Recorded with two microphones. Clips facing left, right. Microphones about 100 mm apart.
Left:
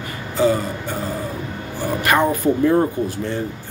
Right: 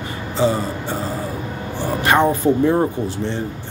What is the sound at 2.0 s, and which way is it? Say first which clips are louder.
Speech: right 2 dB; 25° right (ahead or behind).